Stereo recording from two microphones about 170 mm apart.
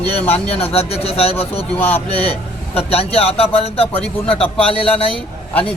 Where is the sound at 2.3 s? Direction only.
35° left (ahead or behind).